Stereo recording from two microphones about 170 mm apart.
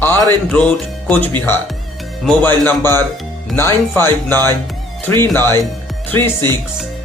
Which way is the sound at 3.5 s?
15° left (ahead or behind).